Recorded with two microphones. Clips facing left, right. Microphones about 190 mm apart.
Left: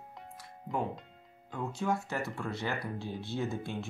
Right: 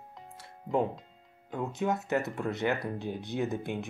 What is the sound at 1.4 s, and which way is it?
Speech, 20° right (ahead or behind).